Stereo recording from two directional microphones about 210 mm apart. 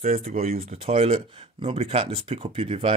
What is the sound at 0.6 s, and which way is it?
Speech, 25° right (ahead or behind).